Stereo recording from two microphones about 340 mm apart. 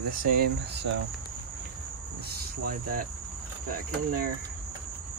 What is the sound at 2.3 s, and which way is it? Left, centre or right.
Insect, right.